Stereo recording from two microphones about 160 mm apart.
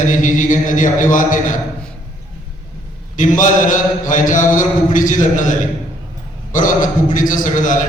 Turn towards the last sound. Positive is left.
turn(degrees=55)  # may be behind; listen again after turning